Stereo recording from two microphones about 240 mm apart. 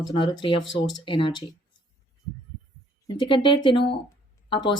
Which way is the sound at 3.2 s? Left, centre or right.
Left.